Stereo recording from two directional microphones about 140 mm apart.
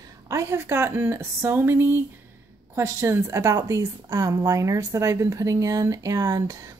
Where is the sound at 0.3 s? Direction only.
20° right (ahead or behind).